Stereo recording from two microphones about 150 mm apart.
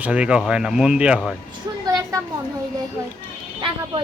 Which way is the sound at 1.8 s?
25° right (ahead or behind).